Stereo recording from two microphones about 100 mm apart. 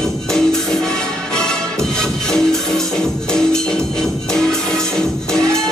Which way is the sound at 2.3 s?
5° left (ahead or behind).